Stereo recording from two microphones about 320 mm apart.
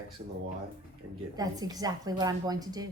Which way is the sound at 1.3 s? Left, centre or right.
Centre.